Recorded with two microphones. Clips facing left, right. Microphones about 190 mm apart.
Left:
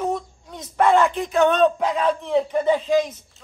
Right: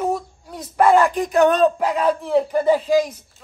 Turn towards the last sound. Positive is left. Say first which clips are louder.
# right 2 dB
turn(degrees=-10)  # may be behind; listen again after turning